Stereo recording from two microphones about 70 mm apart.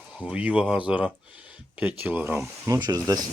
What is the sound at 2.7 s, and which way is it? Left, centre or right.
Speech, right.